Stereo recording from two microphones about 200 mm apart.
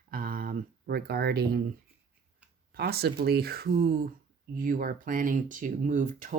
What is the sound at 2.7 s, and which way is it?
Speech, 50° right (ahead or behind).